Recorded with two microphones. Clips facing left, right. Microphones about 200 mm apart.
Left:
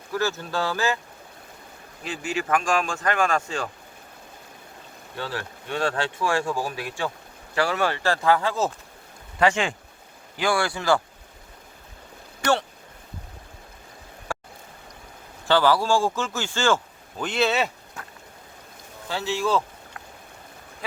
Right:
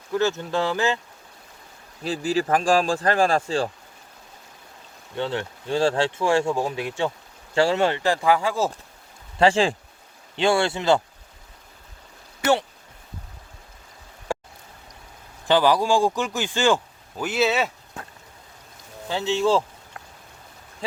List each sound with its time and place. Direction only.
0.1 s speech: 20° right (ahead or behind)
2.0 s speech: 35° right (ahead or behind)
5.1 s speech: 25° right (ahead or behind)
9.4 s speech: 30° right (ahead or behind)
12.4 s speech: 5° right (ahead or behind)
15.4 s speech: 15° right (ahead or behind)
19.0 s speech: 20° right (ahead or behind)